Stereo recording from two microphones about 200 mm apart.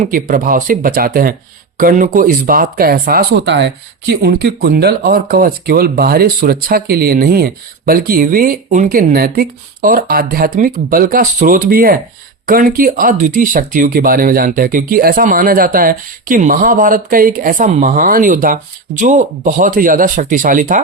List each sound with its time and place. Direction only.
0.0 s speech: 45° right (ahead or behind)